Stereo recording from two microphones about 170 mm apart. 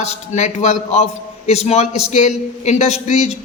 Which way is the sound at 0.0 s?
40° left (ahead or behind).